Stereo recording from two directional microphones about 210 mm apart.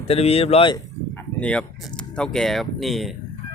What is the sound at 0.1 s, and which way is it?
Speech, 30° left (ahead or behind).